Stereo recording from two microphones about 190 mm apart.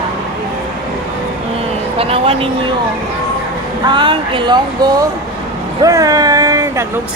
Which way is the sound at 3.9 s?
25° right (ahead or behind).